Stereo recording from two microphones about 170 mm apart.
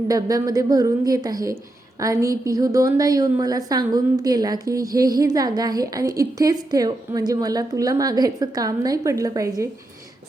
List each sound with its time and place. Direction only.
0.1 s a woman's voice: 20° right (ahead or behind)